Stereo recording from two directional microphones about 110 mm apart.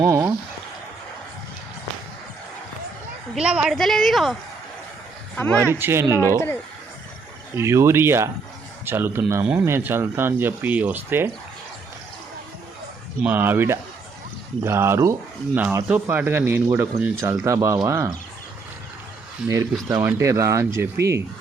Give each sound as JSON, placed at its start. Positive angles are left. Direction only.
{"t": 0.0, "sound": "speech", "side_deg": -25}
{"t": 3.3, "sound": "a woman's voice", "side_deg": -10}
{"t": 5.5, "sound": "speech", "side_deg": -20}
{"t": 6.2, "sound": "speech", "side_deg": 20}
{"t": 7.5, "sound": "speech", "side_deg": -25}
{"t": 13.2, "sound": "speech", "side_deg": -20}
{"t": 19.4, "sound": "a woman's voice", "side_deg": -5}
{"t": 20.0, "sound": "speech", "side_deg": -25}